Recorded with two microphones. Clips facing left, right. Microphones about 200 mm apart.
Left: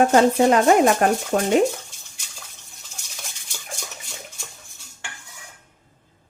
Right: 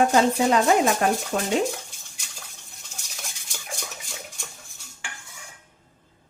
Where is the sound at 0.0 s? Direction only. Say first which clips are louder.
Left 4 dB; 50° left (ahead or behind).